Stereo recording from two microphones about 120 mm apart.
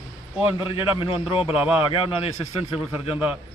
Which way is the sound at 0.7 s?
45° left (ahead or behind).